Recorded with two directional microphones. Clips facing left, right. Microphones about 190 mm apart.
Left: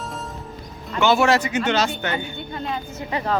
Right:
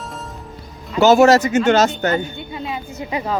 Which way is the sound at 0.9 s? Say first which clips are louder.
Right 7 dB; 40° right (ahead or behind).